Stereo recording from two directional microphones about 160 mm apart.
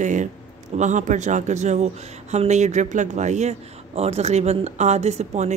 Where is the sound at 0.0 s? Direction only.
50° right (ahead or behind).